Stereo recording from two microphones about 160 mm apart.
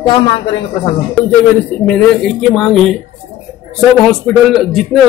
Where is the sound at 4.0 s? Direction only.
Centre (ahead or behind).